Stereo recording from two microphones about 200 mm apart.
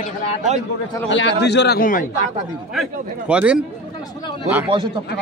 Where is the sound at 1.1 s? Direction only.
60° left (ahead or behind); by 2.0 s 45° left (ahead or behind).